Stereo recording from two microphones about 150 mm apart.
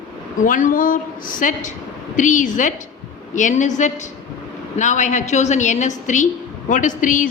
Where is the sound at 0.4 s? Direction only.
65° left (ahead or behind).